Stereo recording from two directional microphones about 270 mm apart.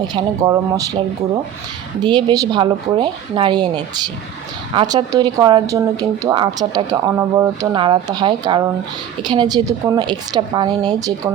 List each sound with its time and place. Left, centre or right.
0.1 s speech: centre
2.0 s speech: centre